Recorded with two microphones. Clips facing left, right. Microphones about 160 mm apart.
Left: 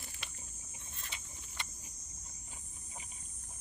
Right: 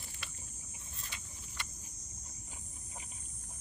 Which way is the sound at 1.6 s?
20° left (ahead or behind).